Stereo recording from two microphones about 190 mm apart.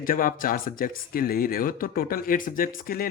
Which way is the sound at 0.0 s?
50° left (ahead or behind).